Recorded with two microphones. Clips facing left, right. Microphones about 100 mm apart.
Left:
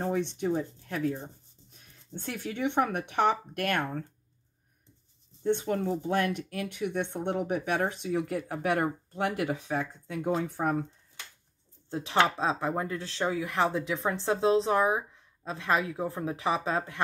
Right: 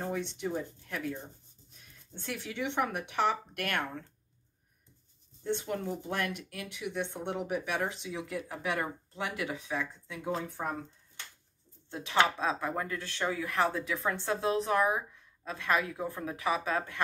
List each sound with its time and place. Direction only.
0.5 s speech: 35° left (ahead or behind)
2.1 s speech: 50° left (ahead or behind)
5.4 s speech: 45° left (ahead or behind)
11.9 s speech: 35° left (ahead or behind)